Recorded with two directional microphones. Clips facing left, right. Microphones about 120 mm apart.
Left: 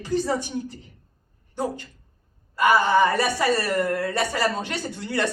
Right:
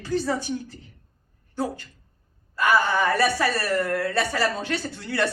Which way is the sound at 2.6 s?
20° left (ahead or behind).